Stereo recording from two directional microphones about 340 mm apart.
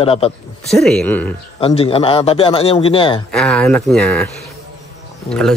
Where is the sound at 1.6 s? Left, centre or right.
Centre.